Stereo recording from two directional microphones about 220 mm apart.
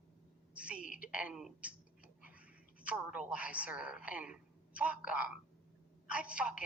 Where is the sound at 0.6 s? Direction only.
5° right (ahead or behind).